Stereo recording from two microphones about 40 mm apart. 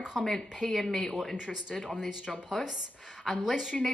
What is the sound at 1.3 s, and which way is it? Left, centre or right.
Speech, centre.